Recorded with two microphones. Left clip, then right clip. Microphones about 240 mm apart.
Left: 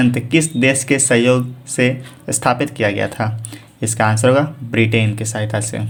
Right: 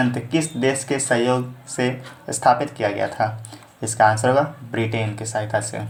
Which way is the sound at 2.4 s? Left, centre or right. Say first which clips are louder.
Left 1 dB; left.